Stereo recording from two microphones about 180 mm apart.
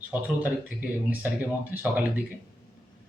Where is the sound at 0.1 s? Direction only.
10° right (ahead or behind).